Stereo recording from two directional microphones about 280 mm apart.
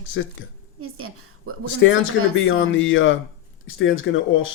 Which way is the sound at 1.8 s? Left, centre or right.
Left.